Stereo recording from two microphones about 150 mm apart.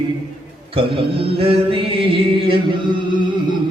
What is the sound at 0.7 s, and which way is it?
Mantra, 35° right (ahead or behind).